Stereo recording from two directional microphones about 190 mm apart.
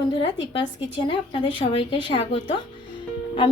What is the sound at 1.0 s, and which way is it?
A woman's voice, 25° left (ahead or behind).